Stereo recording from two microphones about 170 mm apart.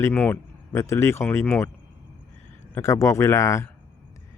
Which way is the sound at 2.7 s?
15° left (ahead or behind).